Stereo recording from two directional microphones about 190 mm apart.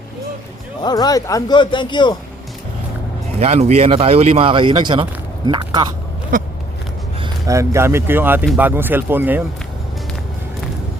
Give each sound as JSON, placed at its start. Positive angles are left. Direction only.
{"t": 0.8, "sound": "speech", "side_deg": 20}
{"t": 3.4, "sound": "speech", "side_deg": -35}
{"t": 6.3, "sound": "a sound", "side_deg": -45}
{"t": 7.2, "sound": "speech", "side_deg": -15}